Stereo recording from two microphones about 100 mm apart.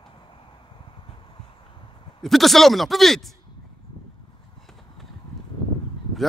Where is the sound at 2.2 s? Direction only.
Centre (ahead or behind).